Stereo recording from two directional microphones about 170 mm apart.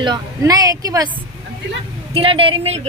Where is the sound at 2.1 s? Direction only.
30° right (ahead or behind).